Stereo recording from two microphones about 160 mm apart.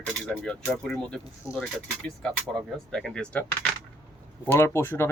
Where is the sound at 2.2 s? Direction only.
Centre (ahead or behind).